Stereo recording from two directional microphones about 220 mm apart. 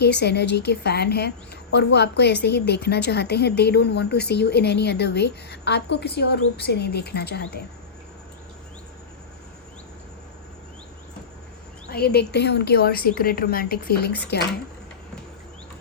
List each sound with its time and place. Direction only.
0.0 s a woman's voice: 50° left (ahead or behind)
11.9 s a woman's voice: 45° left (ahead or behind)